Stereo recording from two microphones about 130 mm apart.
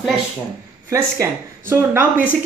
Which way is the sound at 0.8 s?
20° right (ahead or behind).